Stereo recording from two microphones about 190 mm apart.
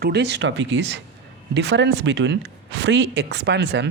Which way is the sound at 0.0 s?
60° right (ahead or behind).